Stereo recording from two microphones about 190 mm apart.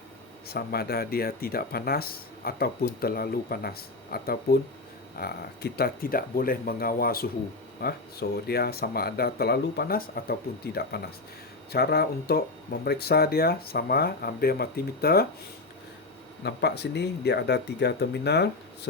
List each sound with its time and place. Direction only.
0.4 s speech: 55° left (ahead or behind)
16.4 s speech: 60° left (ahead or behind)